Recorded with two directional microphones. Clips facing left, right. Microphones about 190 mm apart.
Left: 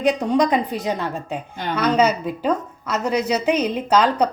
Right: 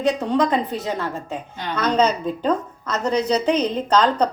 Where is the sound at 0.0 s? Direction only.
15° left (ahead or behind).